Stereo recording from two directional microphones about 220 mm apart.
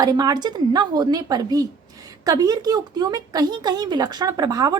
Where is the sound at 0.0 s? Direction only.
15° right (ahead or behind).